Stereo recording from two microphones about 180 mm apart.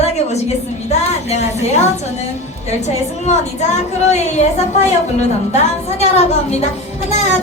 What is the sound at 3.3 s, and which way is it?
Speech, 40° left (ahead or behind).